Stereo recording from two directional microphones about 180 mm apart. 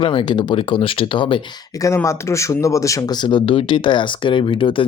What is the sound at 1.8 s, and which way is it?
Speech, 15° left (ahead or behind).